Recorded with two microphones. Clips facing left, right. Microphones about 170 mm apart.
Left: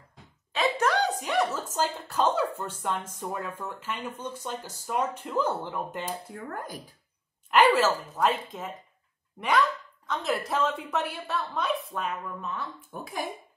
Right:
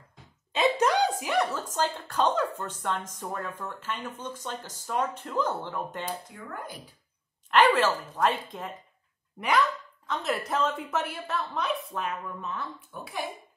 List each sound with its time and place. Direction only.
0.5 s a sound: 20° right (ahead or behind)
1.2 s speech: centre (ahead or behind)
6.3 s speech: 45° left (ahead or behind)
7.5 s a woman's voice: 10° left (ahead or behind)
10.0 s a woman's voice: centre (ahead or behind)
12.9 s speech: 45° left (ahead or behind)